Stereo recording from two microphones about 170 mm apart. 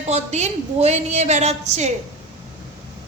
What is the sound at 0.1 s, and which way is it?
A woman's voice, 40° right (ahead or behind).